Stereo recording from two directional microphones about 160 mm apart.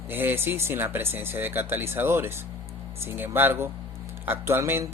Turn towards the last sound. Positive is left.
turn(degrees=-15)  # may be behind; listen again after turning